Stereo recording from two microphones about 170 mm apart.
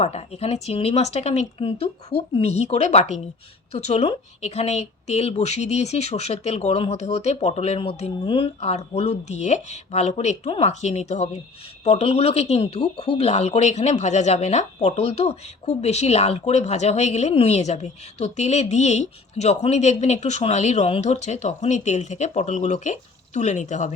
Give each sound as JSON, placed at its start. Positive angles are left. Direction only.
{"t": 0.0, "sound": "speech", "side_deg": 35}